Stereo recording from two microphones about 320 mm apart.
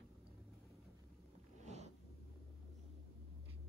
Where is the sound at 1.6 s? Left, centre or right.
Right.